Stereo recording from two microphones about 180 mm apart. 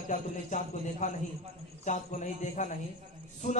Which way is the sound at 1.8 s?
45° left (ahead or behind).